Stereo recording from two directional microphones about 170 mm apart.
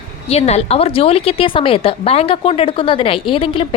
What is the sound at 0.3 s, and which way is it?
A woman's voice, 40° left (ahead or behind).